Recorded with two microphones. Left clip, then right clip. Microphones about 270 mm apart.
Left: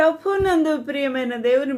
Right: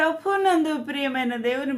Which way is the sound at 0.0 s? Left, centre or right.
Centre.